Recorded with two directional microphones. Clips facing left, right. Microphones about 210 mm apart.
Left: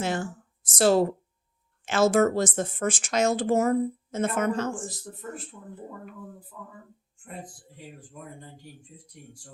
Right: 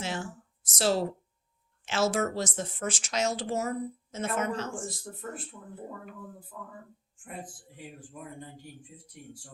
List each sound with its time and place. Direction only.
0.0 s speech: 50° left (ahead or behind)